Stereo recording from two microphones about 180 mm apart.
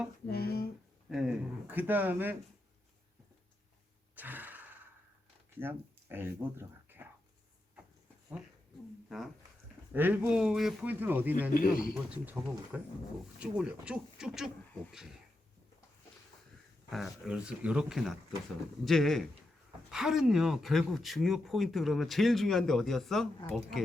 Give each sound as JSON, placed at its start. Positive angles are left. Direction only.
{"t": 0.3, "sound": "a sound", "side_deg": 60}
{"t": 1.1, "sound": "a man's voice", "side_deg": -5}
{"t": 4.1, "sound": "gasp", "side_deg": -10}
{"t": 5.5, "sound": "speech", "side_deg": -10}
{"t": 9.0, "sound": "a man's voice", "side_deg": 0}
{"t": 11.5, "sound": "speech", "side_deg": 50}
{"t": 11.9, "sound": "a man's voice", "side_deg": -10}
{"t": 16.9, "sound": "speech", "side_deg": 0}